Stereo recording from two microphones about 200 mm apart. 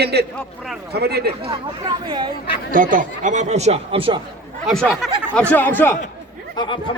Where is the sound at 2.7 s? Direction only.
40° right (ahead or behind).